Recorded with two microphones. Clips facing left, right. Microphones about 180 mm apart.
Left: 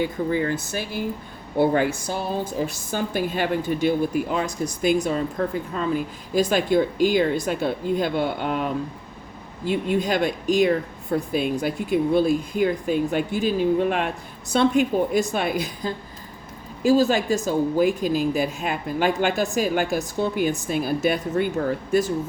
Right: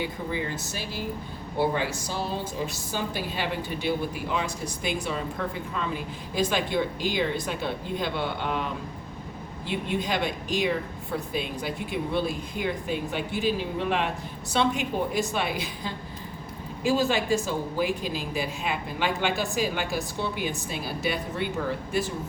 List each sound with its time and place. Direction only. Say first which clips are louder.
0.0 s a woman's voice: left 7 dB; 50° left (ahead or behind)